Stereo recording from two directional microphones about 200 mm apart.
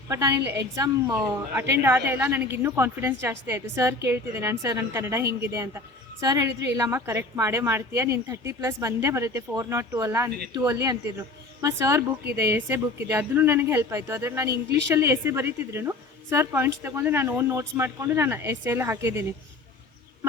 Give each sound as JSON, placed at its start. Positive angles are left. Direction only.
{"t": 0.1, "sound": "a woman's voice", "side_deg": -15}